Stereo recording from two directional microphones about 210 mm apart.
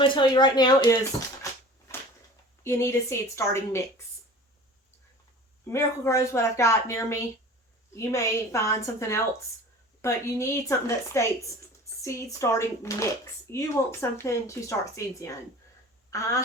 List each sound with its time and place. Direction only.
0.1 s speech: 20° left (ahead or behind)
2.6 s speech: 15° left (ahead or behind)
5.6 s speech: 15° left (ahead or behind)